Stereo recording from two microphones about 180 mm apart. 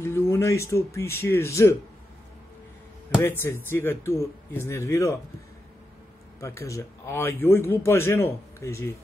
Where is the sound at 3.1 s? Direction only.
15° left (ahead or behind).